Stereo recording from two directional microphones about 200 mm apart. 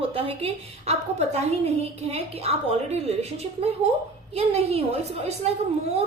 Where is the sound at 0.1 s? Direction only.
30° right (ahead or behind).